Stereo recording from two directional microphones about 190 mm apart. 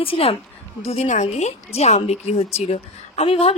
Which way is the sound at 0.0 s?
30° left (ahead or behind).